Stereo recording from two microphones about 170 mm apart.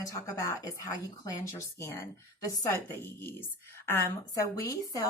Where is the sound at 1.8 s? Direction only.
15° left (ahead or behind).